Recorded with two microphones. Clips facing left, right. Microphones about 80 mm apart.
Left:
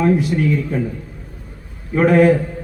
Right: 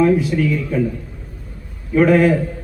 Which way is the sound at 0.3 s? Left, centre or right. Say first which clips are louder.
Even; left.